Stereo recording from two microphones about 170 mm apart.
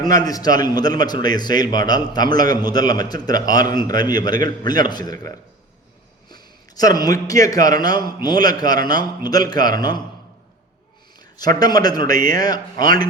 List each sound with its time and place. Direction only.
0.0 s a man's voice: 20° left (ahead or behind)
11.3 s a man's voice: 25° left (ahead or behind)